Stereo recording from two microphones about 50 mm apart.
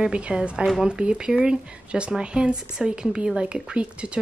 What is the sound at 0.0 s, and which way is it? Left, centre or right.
Speech, centre.